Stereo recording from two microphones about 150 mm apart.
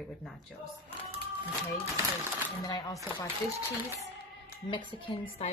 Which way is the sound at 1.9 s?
15° right (ahead or behind).